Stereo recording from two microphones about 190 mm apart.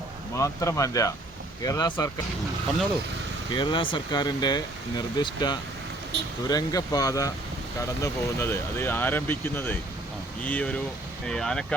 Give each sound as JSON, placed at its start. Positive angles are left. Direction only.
{"t": 0.3, "sound": "speech", "side_deg": 15}
{"t": 3.5, "sound": "speech", "side_deg": 25}